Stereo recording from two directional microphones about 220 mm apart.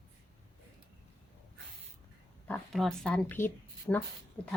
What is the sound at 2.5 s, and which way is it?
Speech, 5° left (ahead or behind).